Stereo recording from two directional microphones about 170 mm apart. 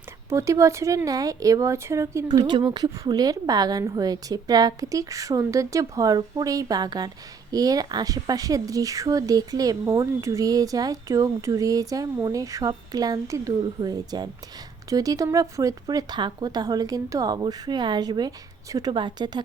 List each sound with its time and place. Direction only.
0.3 s speech: 15° right (ahead or behind)